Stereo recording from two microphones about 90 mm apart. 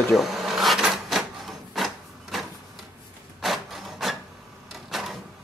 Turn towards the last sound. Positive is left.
turn(degrees=0)  # may be behind; listen again after turning